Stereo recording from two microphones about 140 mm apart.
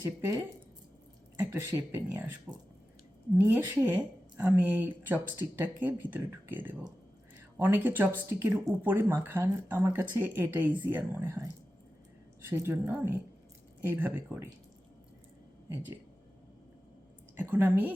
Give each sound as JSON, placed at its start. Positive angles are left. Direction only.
{"t": 1.4, "sound": "speech", "side_deg": -15}
{"t": 3.3, "sound": "speech", "side_deg": -15}
{"t": 12.5, "sound": "speech", "side_deg": -20}
{"t": 17.3, "sound": "speech", "side_deg": -15}